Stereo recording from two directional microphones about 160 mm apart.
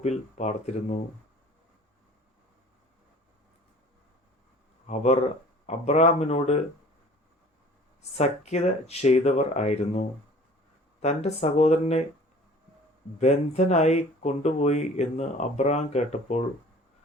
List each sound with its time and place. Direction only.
0.0 s speech: 45° left (ahead or behind)
4.9 s speech: 45° left (ahead or behind)
8.1 s speech: 45° left (ahead or behind)
13.1 s speech: 45° left (ahead or behind)